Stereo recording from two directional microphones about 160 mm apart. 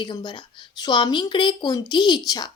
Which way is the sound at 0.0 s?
30° left (ahead or behind).